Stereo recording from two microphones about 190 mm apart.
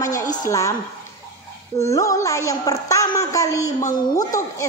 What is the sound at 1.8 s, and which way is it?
A woman's voice, 15° left (ahead or behind).